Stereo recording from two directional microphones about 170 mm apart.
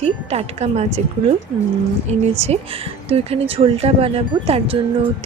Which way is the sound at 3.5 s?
35° right (ahead or behind).